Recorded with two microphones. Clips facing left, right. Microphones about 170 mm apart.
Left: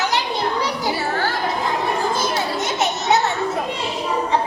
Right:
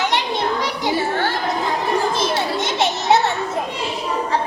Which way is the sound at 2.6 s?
30° right (ahead or behind).